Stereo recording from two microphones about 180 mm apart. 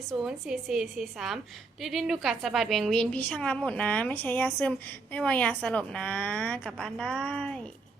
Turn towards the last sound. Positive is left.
turn(degrees=5)  # may be behind; listen again after turning